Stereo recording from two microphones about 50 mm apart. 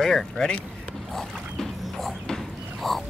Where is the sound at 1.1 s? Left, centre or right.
Centre.